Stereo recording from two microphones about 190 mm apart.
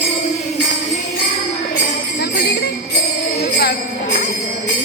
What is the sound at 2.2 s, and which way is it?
Jingle bell, 55° left (ahead or behind).